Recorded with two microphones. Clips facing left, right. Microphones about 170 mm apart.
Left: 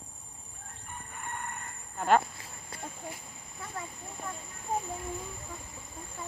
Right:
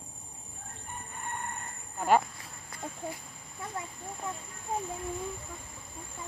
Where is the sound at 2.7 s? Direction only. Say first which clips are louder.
Right 2 dB; 25° left (ahead or behind).